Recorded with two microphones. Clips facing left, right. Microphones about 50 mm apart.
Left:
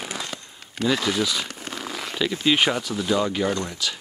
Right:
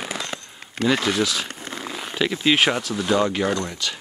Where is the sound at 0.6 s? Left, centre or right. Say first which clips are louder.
Right 2 dB; right.